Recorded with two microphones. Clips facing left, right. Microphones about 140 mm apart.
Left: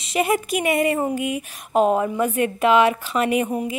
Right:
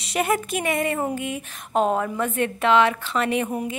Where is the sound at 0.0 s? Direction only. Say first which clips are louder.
Left 2 dB; centre (ahead or behind).